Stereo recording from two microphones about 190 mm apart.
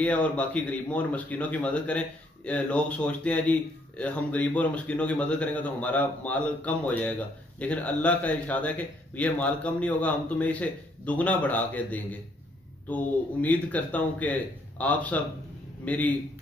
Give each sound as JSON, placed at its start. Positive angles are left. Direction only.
{"t": 0.0, "sound": "a man's voice", "side_deg": 5}